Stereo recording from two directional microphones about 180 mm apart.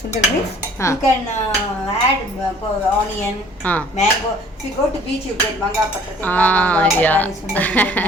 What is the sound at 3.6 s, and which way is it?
Speech, 10° left (ahead or behind).